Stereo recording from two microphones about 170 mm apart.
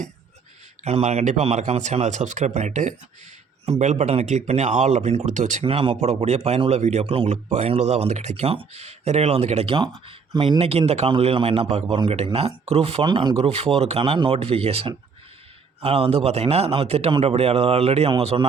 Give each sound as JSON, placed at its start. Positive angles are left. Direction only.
{"t": 0.9, "sound": "speech", "side_deg": -40}